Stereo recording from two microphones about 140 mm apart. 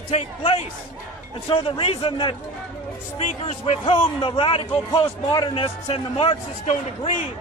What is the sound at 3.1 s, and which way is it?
A man's voice, 45° left (ahead or behind).